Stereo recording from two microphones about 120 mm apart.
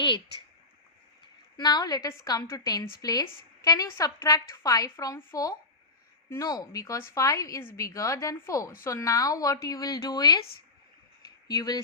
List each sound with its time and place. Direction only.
1.5 s a woman's voice: 35° left (ahead or behind)
11.4 s a woman's voice: 35° left (ahead or behind)